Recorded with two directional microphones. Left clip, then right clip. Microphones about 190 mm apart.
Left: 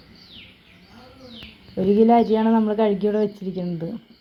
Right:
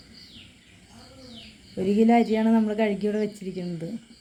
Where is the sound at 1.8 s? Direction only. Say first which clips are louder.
Left 6 dB; 20° left (ahead or behind).